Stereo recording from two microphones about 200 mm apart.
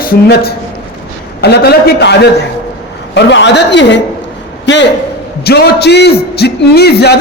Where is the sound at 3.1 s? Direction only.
60° left (ahead or behind).